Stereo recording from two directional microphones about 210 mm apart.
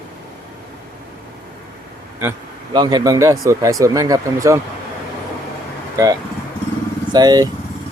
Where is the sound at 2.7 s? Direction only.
20° right (ahead or behind).